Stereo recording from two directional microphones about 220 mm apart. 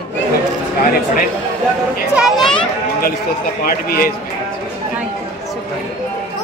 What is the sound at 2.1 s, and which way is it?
Speech, centre (ahead or behind).